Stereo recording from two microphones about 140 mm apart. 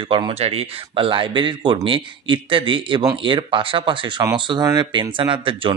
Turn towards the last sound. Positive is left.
turn(degrees=-35)  # may be behind; listen again after turning